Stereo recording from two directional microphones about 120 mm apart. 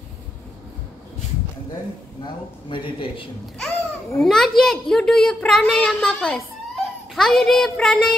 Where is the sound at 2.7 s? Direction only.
45° left (ahead or behind).